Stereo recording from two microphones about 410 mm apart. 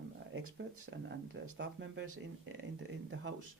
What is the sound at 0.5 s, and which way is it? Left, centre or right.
Speech, right.